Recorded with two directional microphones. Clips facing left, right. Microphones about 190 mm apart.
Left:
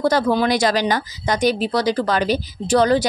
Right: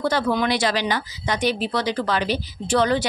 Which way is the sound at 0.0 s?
35° left (ahead or behind).